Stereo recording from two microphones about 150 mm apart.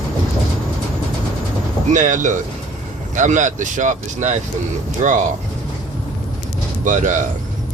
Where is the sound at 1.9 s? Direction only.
55° right (ahead or behind).